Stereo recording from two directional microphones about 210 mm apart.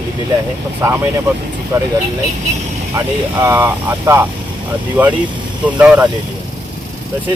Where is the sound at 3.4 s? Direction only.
10° right (ahead or behind).